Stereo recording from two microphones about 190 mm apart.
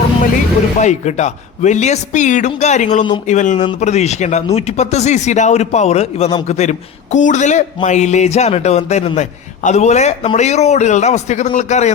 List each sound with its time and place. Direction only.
0.8 s speech: 35° left (ahead or behind)